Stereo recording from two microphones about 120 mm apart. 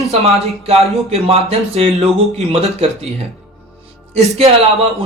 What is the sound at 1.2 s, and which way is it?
A man's voice, 55° right (ahead or behind).